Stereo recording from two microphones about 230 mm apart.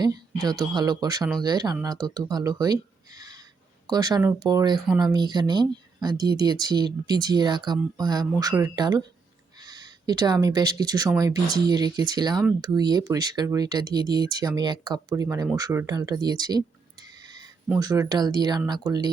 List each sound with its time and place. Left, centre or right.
0.0 s speech: centre
17.7 s speech: centre